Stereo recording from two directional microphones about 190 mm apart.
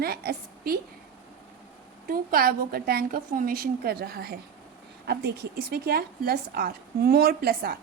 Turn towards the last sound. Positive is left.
turn(degrees=-55)  # may be behind; listen again after turning